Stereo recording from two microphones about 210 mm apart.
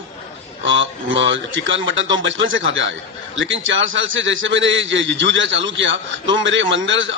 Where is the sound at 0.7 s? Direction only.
60° right (ahead or behind).